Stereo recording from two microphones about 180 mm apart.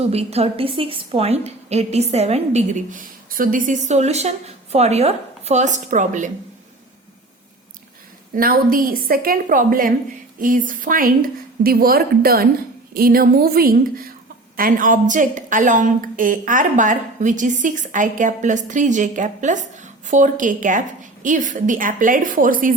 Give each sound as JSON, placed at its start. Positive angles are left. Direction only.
{"t": 0.1, "sound": "a woman's voice", "side_deg": -35}
{"t": 8.4, "sound": "a woman's voice", "side_deg": -55}